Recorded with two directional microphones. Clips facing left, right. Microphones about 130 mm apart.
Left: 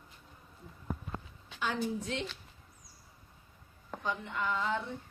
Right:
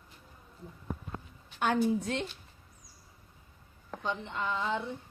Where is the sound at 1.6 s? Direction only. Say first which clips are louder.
Right 6 dB; 55° right (ahead or behind).